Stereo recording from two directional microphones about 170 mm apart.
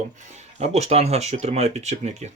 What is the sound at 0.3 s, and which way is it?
Speech, 40° right (ahead or behind).